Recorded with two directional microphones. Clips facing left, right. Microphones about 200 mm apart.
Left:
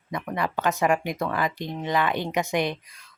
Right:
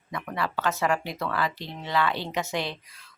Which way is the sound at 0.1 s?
15° left (ahead or behind).